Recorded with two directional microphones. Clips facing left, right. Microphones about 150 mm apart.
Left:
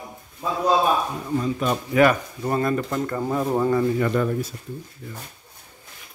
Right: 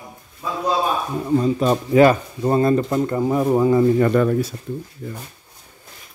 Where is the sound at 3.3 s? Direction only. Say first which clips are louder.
Right 4 dB; 10° right (ahead or behind).